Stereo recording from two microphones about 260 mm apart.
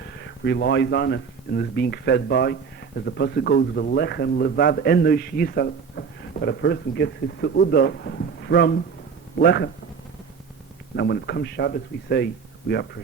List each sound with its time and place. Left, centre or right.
0.2 s speech: left
10.9 s speech: left